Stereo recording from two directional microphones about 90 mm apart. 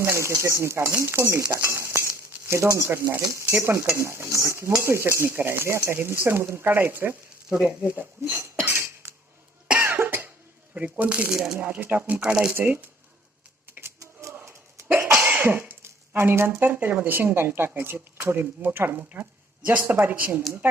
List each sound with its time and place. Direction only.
0.0 s stir: 30° right (ahead or behind)
1.7 s cutlery: 30° right (ahead or behind)
8.6 s cough: 25° right (ahead or behind)
10.8 s speech: 15° right (ahead or behind)
11.3 s speech: 5° right (ahead or behind)
11.5 s speech: 20° right (ahead or behind)
12.5 s cutlery: 20° right (ahead or behind)
13.7 s typewriter: 20° right (ahead or behind)
14.0 s a sound: 35° right (ahead or behind)
14.3 s cough: 25° right (ahead or behind)
15.1 s cough: 15° right (ahead or behind)
16.6 s cutlery: 20° right (ahead or behind)